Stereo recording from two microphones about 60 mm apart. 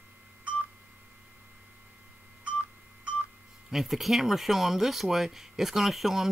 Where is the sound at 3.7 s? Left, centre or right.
Centre.